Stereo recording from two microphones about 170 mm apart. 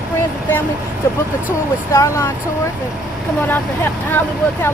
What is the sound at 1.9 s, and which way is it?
Speech, 15° left (ahead or behind).